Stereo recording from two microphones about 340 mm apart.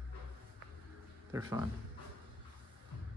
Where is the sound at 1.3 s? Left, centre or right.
Centre.